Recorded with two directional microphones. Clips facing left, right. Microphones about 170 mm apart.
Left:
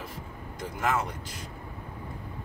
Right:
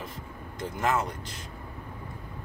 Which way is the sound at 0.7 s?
5° left (ahead or behind).